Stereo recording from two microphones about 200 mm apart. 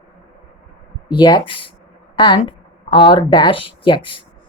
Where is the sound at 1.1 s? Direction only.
20° left (ahead or behind).